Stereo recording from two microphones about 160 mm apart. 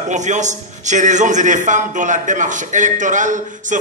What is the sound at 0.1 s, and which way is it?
A man's voice, 50° right (ahead or behind).